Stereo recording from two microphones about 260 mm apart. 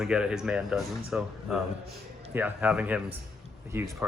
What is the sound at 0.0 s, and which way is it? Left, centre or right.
Speech, centre.